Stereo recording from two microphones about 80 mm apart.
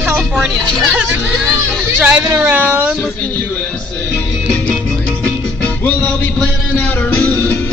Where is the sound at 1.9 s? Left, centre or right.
Right.